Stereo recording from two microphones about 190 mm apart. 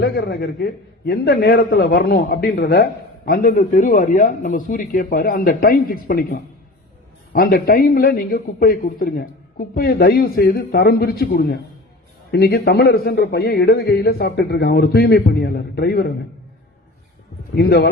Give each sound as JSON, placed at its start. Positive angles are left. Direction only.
{"t": 0.0, "sound": "a man's voice", "side_deg": 60}
{"t": 17.5, "sound": "a man's voice", "side_deg": 55}